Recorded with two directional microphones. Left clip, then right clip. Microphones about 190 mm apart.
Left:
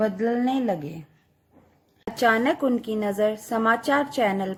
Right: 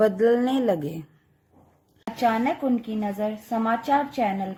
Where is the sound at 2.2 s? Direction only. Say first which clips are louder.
Left 2 dB; 40° left (ahead or behind).